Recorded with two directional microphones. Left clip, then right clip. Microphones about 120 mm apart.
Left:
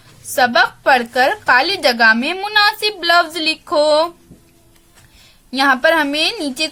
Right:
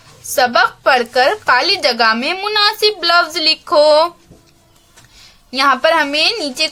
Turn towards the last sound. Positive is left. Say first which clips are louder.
# right 3 dB
turn(degrees=35)  # may be behind; listen again after turning